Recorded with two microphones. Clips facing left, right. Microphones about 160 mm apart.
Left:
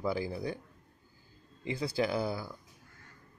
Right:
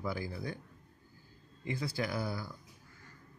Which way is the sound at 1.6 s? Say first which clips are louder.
Left 4 dB; 25° left (ahead or behind).